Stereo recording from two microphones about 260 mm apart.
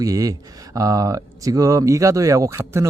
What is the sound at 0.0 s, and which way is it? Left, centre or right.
Speech, centre.